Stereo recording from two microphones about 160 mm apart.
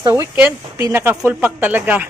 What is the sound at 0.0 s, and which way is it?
Speech, 20° right (ahead or behind).